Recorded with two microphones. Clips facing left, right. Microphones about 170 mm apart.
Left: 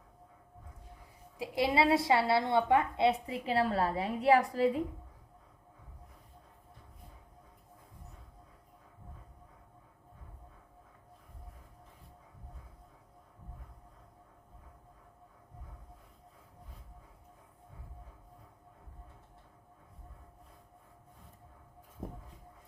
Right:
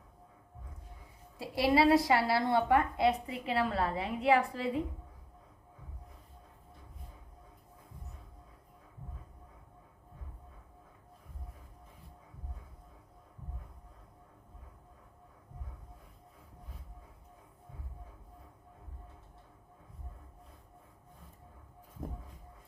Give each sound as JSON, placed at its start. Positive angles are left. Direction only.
{"t": 1.4, "sound": "a woman's voice", "side_deg": 20}